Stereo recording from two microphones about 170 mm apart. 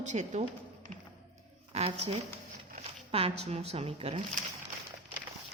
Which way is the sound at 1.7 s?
40° right (ahead or behind).